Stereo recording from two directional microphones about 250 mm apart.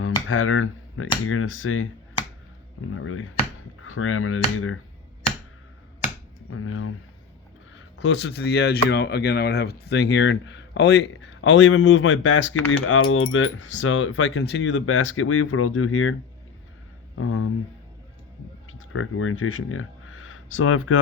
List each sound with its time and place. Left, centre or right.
0.3 s speech: left
2.9 s speech: left
6.5 s speech: left
7.9 s speech: left
17.2 s speech: left
18.7 s speech: left